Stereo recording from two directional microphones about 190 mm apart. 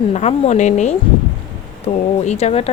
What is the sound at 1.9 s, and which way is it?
Speech, 25° left (ahead or behind).